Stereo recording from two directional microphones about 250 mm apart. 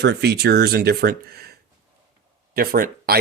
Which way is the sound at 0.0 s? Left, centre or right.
Right.